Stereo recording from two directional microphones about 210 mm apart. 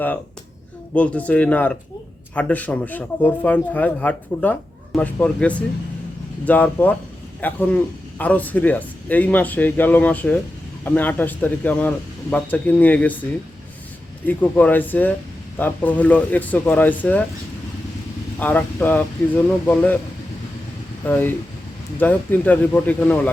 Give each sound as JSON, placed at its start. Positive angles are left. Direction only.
{"t": 0.9, "sound": "a man's voice", "side_deg": 5}
{"t": 14.3, "sound": "a man's voice", "side_deg": 10}
{"t": 18.3, "sound": "a man's voice", "side_deg": 10}
{"t": 21.1, "sound": "a man's voice", "side_deg": 10}